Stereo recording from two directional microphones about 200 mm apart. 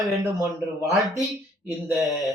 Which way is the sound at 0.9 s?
Centre (ahead or behind).